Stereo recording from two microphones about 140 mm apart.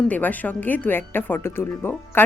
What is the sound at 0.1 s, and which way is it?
Speech, 10° left (ahead or behind).